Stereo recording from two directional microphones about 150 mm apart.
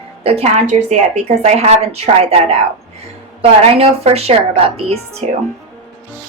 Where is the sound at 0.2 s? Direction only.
40° right (ahead or behind).